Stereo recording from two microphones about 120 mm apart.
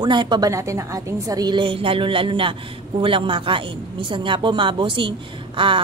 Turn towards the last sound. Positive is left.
turn(degrees=-45)  # may be behind; listen again after turning